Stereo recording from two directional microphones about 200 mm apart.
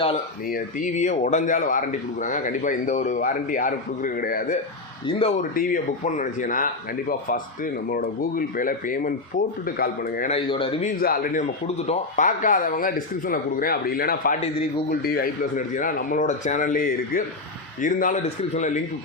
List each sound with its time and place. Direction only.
0.5 s a man's voice: 40° left (ahead or behind)
10.2 s a man's voice: 30° left (ahead or behind)
11.0 s a man's voice: 45° left (ahead or behind)